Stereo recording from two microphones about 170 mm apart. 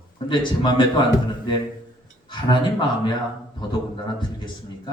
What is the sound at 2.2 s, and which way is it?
Speech, 30° left (ahead or behind).